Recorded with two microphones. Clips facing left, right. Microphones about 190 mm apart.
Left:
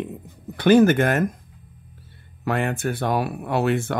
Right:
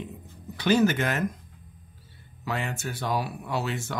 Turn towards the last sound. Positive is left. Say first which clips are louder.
# left 9 dB
turn(degrees=55)  # may be behind; listen again after turning